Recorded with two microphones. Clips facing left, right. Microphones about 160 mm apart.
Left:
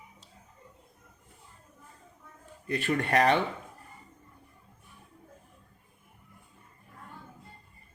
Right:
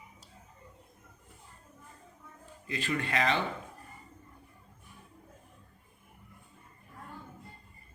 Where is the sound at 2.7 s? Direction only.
60° left (ahead or behind).